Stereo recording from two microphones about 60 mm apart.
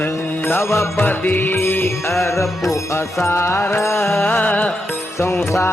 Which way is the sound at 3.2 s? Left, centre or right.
Left.